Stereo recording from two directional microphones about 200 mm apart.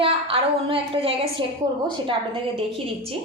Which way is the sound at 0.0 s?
30° right (ahead or behind).